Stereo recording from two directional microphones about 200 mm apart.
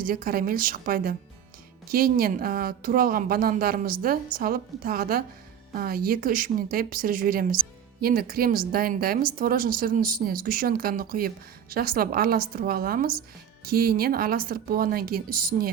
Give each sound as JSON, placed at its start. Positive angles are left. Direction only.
{"t": 0.0, "sound": "speech", "side_deg": -45}